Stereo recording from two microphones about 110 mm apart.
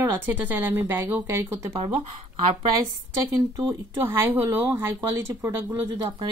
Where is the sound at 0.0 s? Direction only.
20° right (ahead or behind).